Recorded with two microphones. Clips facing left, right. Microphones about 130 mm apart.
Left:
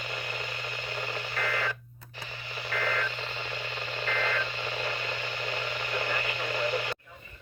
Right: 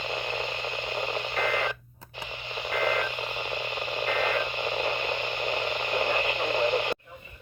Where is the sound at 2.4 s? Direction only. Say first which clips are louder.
Right 5 dB; 20° right (ahead or behind).